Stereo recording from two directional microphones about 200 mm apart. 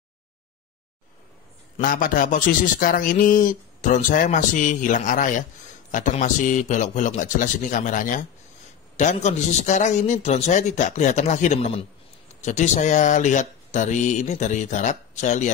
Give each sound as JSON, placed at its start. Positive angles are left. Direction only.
{"t": 1.8, "sound": "a man's voice", "side_deg": 45}